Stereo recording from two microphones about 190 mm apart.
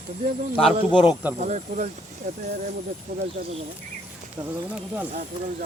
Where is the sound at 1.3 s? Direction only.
40° right (ahead or behind).